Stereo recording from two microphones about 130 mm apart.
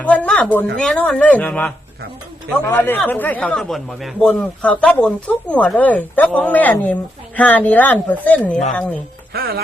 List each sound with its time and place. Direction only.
0.0 s speech: 10° left (ahead or behind)
2.7 s speech: 15° left (ahead or behind)